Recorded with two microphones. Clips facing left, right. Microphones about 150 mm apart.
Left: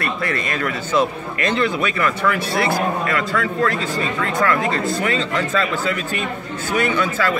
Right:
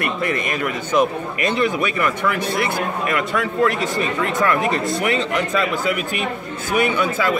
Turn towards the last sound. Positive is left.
turn(degrees=-10)  # may be behind; listen again after turning